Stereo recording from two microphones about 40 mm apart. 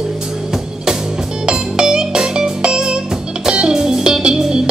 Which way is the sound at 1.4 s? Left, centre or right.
Centre.